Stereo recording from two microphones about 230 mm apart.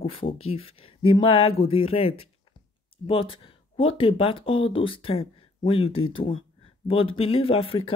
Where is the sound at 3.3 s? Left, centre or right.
Left.